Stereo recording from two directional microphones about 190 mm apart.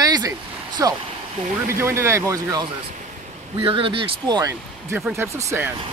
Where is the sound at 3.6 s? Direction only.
30° right (ahead or behind).